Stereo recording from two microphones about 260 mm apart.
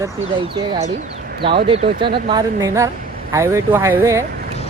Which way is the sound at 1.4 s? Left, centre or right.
Centre.